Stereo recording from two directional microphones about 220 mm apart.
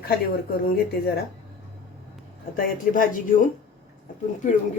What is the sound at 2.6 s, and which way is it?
Speech, 40° left (ahead or behind).